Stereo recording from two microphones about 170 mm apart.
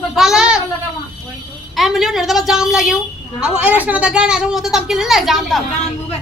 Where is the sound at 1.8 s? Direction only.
Centre (ahead or behind).